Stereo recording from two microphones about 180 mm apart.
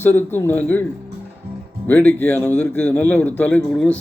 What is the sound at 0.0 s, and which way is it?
Speech, 10° left (ahead or behind).